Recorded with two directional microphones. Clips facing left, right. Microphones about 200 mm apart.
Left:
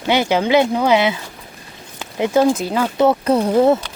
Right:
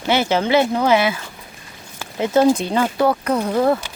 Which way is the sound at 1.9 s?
15° left (ahead or behind).